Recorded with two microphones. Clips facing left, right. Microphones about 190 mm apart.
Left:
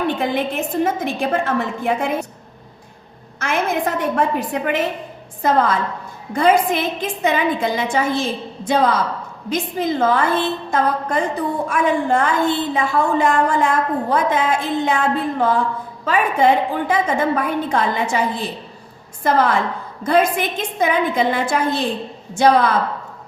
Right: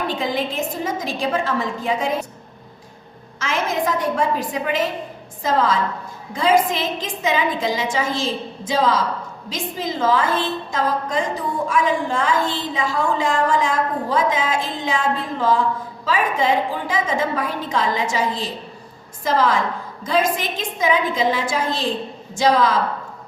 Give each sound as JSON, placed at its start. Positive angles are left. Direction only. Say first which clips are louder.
{"t": 0.1, "sound": "a woman's voice", "louder": "left 3 dB", "side_deg": 60}
{"t": 3.4, "sound": "a woman's voice", "louder": "left 2 dB", "side_deg": 60}